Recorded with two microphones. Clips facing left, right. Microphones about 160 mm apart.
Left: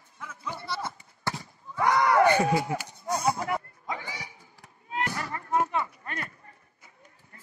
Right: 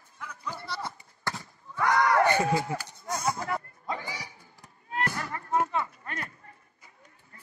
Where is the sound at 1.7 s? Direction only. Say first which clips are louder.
Left 2 dB; 20° left (ahead or behind).